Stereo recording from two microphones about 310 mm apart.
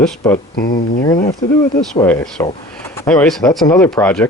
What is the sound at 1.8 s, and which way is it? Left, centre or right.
Speech, centre.